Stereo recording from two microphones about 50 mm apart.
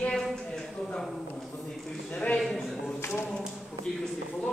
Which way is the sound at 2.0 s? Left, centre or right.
Left.